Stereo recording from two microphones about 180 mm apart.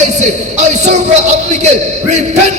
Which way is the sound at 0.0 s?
40° right (ahead or behind).